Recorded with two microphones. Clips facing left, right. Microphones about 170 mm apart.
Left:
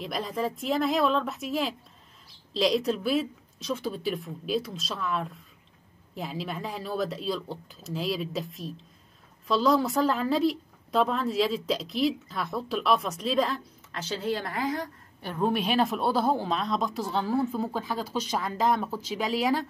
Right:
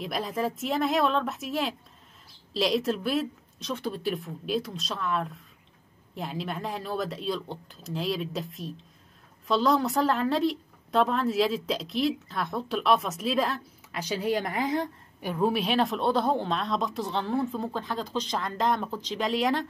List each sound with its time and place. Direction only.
0.0 s speech: centre (ahead or behind)
13.9 s speech: 10° right (ahead or behind)
15.2 s speech: 5° right (ahead or behind)